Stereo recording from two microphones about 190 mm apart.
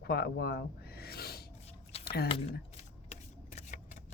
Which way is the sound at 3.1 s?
35° left (ahead or behind).